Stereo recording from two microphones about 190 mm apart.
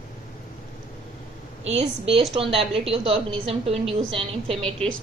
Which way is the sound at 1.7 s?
30° right (ahead or behind).